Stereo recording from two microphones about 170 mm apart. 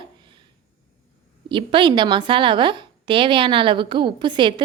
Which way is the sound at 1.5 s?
30° right (ahead or behind).